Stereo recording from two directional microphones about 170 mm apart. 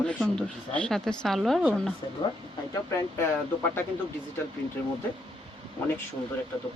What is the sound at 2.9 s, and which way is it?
Speech, 15° left (ahead or behind).